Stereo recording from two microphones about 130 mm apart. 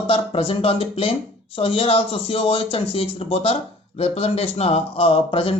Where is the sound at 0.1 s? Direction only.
45° left (ahead or behind).